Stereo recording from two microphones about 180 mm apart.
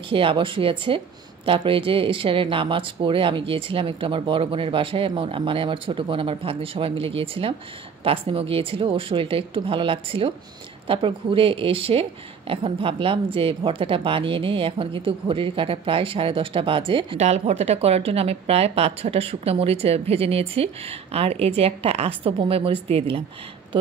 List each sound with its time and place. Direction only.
0.1 s a woman's voice: 30° right (ahead or behind)